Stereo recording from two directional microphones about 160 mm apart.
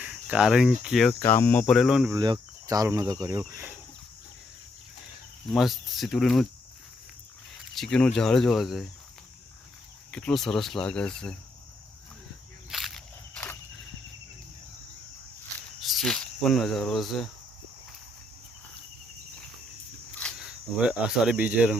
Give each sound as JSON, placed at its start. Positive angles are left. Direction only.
{"t": 0.0, "sound": "cricket", "side_deg": -10}
{"t": 1.2, "sound": "speech", "side_deg": 15}
{"t": 2.0, "sound": "speech", "side_deg": -25}
{"t": 5.5, "sound": "speech", "side_deg": 0}
{"t": 7.8, "sound": "speech", "side_deg": 5}
{"t": 10.1, "sound": "speech", "side_deg": 5}
{"t": 12.7, "sound": "a sound", "side_deg": 0}
{"t": 15.8, "sound": "speech", "side_deg": 0}
{"t": 20.4, "sound": "speech", "side_deg": -5}